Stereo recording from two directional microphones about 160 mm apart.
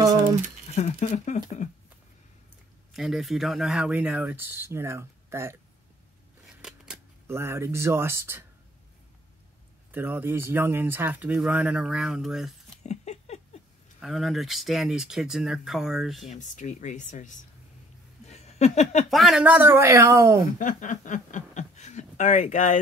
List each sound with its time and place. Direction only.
0.7 s speech: 45° left (ahead or behind)
2.9 s speech: centre (ahead or behind); by 5.6 s 15° right (ahead or behind)
6.4 s scissors: 5° right (ahead or behind)
7.2 s speech: 15° right (ahead or behind)
9.9 s speech: 10° right (ahead or behind)
12.8 s patter: 45° left (ahead or behind)
13.9 s speech: centre (ahead or behind)
16.3 s speech: 50° left (ahead or behind)
18.2 s a sound: 40° left (ahead or behind)
19.0 s speech: centre (ahead or behind); by 20.3 s 20° right (ahead or behind)
20.5 s speech: 55° left (ahead or behind)